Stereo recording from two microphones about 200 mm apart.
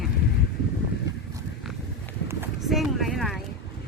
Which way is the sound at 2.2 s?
10° right (ahead or behind).